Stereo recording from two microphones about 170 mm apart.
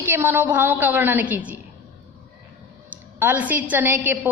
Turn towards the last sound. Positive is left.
turn(degrees=-10)  # may be behind; listen again after turning